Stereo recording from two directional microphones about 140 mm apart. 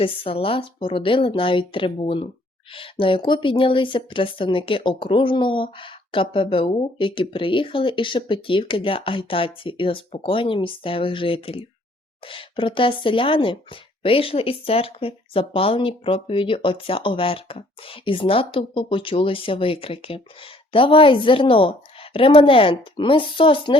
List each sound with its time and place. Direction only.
0.0 s speech: 40° left (ahead or behind)